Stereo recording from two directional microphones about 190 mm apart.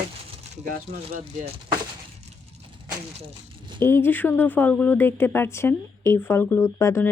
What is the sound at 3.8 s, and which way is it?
Speech, 10° left (ahead or behind).